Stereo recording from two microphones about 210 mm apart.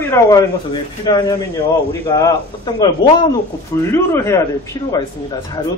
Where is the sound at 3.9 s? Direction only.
10° left (ahead or behind).